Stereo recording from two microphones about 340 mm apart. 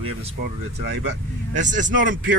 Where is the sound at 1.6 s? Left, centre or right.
Right.